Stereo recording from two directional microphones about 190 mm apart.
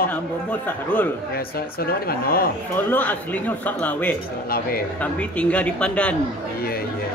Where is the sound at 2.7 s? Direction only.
10° left (ahead or behind).